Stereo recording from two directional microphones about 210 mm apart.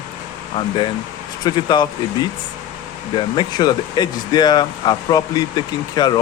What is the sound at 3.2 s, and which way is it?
Speech, 20° left (ahead or behind).